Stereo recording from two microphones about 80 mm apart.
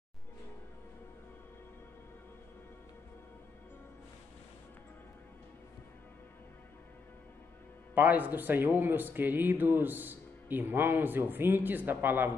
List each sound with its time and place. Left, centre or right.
7.9 s speech: right